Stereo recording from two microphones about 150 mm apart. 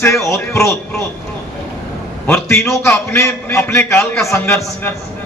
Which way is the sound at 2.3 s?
15° left (ahead or behind).